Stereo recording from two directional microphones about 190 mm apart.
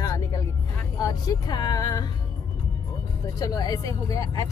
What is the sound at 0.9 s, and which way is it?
Speech, 20° left (ahead or behind).